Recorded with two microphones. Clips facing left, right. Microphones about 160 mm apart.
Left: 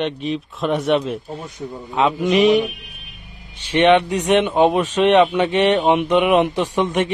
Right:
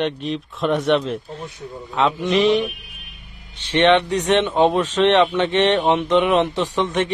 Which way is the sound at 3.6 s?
10° left (ahead or behind).